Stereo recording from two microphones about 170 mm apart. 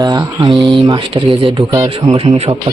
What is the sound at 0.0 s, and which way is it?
Speech, 20° right (ahead or behind).